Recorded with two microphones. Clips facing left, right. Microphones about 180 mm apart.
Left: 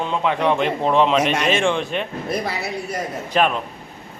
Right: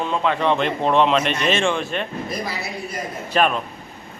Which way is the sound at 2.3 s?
60° left (ahead or behind).